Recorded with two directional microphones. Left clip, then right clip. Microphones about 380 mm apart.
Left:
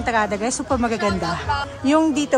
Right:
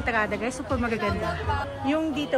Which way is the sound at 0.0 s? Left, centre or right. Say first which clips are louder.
Left 5 dB; centre.